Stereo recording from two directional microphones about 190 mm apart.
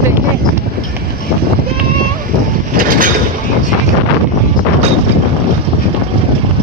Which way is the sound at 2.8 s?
45° right (ahead or behind).